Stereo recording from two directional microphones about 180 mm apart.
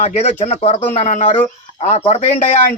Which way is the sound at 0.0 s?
40° left (ahead or behind).